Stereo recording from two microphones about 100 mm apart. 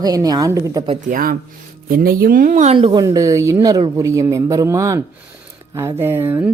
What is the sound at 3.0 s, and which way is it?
A woman's voice, 35° right (ahead or behind).